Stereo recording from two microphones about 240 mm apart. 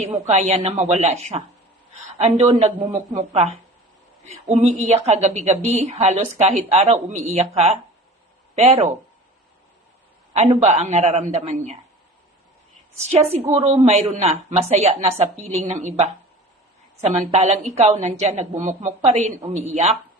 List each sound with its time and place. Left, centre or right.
0.0 s a woman's voice: right
10.3 s a woman's voice: right
13.1 s a woman's voice: right